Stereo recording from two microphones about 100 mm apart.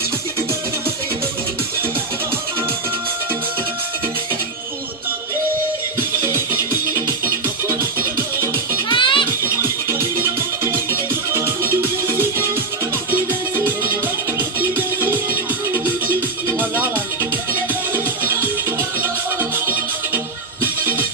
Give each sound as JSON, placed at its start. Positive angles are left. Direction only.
{"t": 6.0, "sound": "music", "side_deg": -25}
{"t": 8.9, "sound": "music", "side_deg": 55}
{"t": 9.4, "sound": "music", "side_deg": -25}
{"t": 14.3, "sound": "music", "side_deg": -20}